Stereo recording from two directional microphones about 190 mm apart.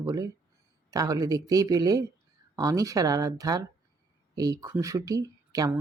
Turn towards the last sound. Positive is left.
turn(degrees=-20)  # may be behind; listen again after turning